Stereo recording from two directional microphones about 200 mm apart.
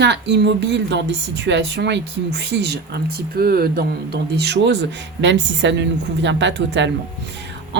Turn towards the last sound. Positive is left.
turn(degrees=-60)  # may be behind; listen again after turning